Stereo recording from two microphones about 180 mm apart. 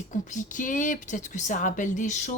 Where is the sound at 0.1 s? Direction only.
45° left (ahead or behind).